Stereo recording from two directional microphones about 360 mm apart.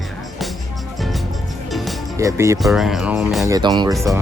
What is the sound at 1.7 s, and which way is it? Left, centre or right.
Speech, centre.